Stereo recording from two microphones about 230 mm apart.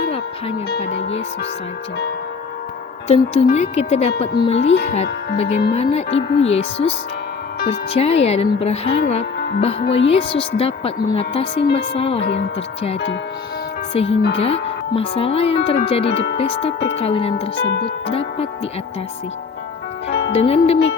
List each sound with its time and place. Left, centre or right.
3.1 s a woman's voice: left
6.1 s speech: left
6.5 s a woman's voice: left
12.2 s speech: left
12.5 s a woman's voice: left
14.1 s speech: left
14.3 s a woman's voice: left
20.1 s music: left
20.3 s a woman's voice: left